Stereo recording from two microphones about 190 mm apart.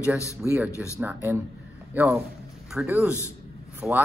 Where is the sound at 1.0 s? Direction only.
10° right (ahead or behind).